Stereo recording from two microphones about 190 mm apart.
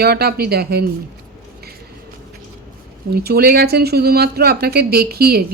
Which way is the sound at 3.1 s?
55° right (ahead or behind).